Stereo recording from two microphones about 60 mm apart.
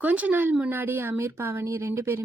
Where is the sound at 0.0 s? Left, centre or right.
Right.